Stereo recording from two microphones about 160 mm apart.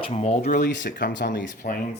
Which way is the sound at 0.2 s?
45° left (ahead or behind).